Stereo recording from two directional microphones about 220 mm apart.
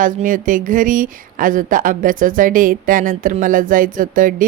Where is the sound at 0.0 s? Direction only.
35° right (ahead or behind).